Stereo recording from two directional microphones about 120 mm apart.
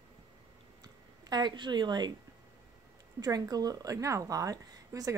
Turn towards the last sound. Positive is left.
turn(degrees=-30)  # may be behind; listen again after turning